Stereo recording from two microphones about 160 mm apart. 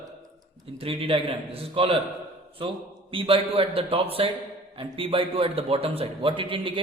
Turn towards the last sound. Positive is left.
turn(degrees=-30)  # may be behind; listen again after turning